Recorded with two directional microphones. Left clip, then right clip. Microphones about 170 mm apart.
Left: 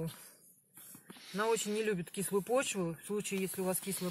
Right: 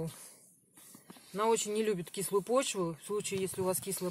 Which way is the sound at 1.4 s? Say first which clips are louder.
Right 3 dB; 40° right (ahead or behind).